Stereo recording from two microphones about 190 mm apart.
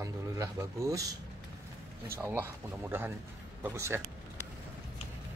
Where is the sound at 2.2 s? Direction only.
10° right (ahead or behind).